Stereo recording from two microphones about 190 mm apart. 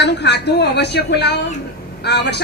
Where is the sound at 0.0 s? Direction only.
65° left (ahead or behind).